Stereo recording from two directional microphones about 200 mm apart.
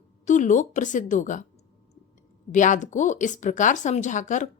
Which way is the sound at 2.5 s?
40° left (ahead or behind).